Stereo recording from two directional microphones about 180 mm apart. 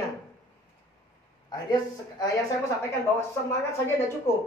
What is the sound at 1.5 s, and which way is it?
Speech, 20° left (ahead or behind).